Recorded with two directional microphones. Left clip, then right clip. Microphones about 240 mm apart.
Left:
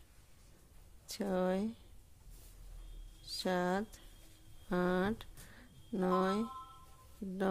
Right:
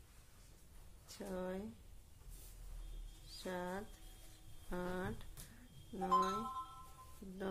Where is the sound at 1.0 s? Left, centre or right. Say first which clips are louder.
Left 10 dB; left.